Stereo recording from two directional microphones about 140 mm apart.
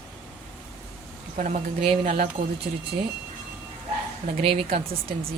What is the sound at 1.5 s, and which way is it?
Speech, 45° right (ahead or behind).